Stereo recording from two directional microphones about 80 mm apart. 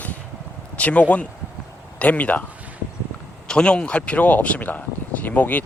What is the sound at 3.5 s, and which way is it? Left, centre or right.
Speech, centre.